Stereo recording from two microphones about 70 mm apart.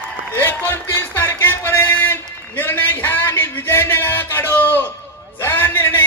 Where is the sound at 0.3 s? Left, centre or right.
Left.